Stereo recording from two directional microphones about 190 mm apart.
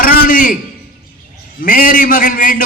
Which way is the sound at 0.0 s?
50° left (ahead or behind).